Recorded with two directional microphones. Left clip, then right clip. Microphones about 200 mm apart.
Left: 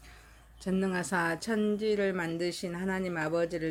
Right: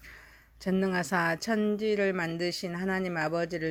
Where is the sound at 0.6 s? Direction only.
35° right (ahead or behind).